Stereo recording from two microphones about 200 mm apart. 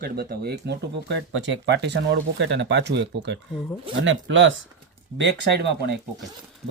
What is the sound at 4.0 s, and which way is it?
Speech, 70° right (ahead or behind).